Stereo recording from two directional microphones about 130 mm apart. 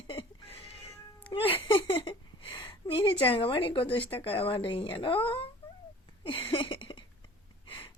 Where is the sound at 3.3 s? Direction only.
45° left (ahead or behind).